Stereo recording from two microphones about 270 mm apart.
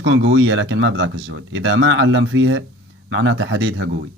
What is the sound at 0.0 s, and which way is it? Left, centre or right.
Speech, right.